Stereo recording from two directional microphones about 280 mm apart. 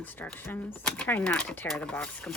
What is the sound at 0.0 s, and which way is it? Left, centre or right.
Speech, centre.